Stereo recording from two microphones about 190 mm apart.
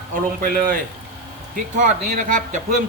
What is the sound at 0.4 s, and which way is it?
Speech, 50° right (ahead or behind).